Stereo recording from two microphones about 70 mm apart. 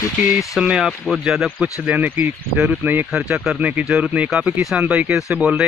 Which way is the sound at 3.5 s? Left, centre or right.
Centre.